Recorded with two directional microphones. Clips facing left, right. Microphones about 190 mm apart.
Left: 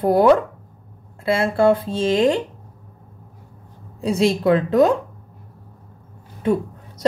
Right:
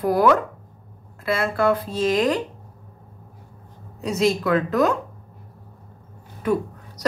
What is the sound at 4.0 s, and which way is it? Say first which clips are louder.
Speech: left 2 dB; 30° left (ahead or behind).